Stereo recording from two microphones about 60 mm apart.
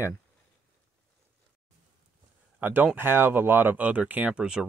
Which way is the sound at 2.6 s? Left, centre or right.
Right.